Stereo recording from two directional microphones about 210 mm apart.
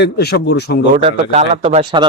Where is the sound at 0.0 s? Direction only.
55° left (ahead or behind).